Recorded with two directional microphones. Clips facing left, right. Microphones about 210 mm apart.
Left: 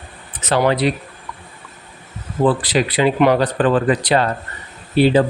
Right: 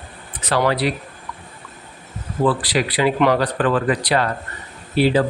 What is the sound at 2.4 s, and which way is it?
Speech, 25° left (ahead or behind).